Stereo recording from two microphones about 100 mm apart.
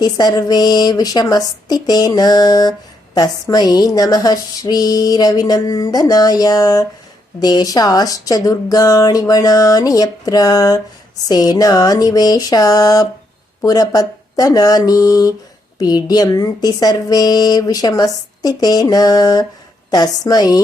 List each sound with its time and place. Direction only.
0.0 s a woman's voice: 40° left (ahead or behind)